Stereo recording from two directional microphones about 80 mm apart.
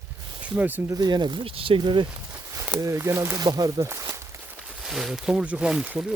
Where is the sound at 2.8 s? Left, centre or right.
Right.